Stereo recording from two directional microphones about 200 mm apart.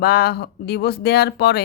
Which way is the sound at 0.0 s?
50° left (ahead or behind).